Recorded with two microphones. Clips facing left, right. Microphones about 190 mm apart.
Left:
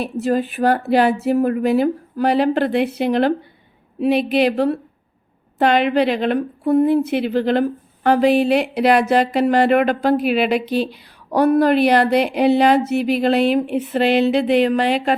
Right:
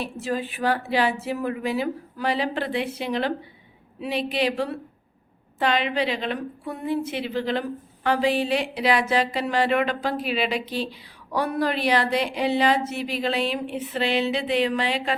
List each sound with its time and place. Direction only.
0.0 s a woman's voice: 50° left (ahead or behind)
5.5 s a woman's voice: 60° left (ahead or behind)